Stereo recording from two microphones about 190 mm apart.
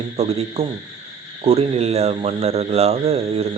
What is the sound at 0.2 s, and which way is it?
Speech, 30° right (ahead or behind).